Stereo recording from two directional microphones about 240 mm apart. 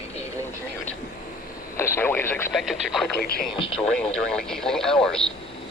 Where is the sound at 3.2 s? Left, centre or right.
Left.